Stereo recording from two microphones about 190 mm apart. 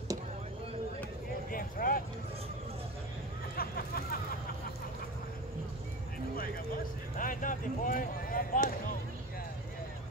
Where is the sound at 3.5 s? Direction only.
50° left (ahead or behind).